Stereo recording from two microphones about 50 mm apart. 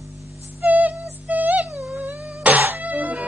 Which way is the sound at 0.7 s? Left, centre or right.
Right.